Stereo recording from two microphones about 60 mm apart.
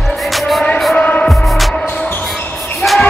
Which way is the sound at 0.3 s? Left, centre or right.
Centre.